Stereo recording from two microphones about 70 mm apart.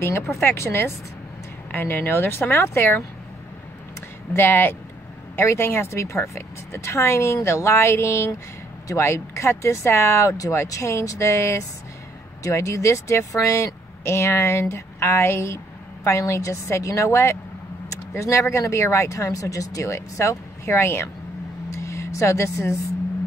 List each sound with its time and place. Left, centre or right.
0.0 s speech: left
1.7 s speech: left
4.3 s speech: left
21.6 s a sound: left